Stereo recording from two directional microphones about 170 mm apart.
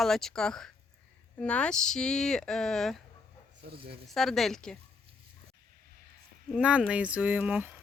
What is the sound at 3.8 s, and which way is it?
Speech, 30° right (ahead or behind).